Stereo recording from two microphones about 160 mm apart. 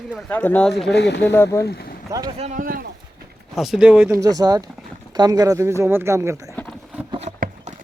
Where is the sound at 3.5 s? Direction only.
Centre (ahead or behind).